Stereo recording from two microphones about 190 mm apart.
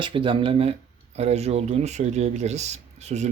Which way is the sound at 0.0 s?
25° right (ahead or behind).